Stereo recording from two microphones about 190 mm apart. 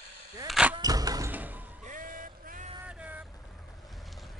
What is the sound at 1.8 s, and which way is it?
Vehicle, 45° right (ahead or behind).